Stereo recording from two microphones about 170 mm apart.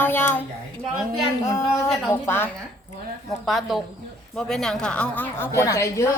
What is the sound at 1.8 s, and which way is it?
Speech, 15° left (ahead or behind).